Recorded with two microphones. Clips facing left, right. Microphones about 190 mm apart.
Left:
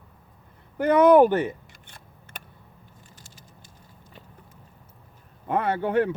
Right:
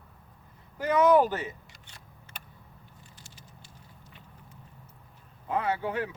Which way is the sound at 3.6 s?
50° left (ahead or behind).